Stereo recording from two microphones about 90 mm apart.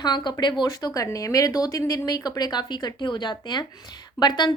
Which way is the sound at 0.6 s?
40° left (ahead or behind).